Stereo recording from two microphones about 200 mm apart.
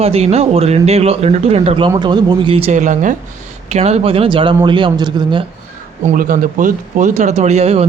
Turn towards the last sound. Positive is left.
turn(degrees=-30)  # may be behind; listen again after turning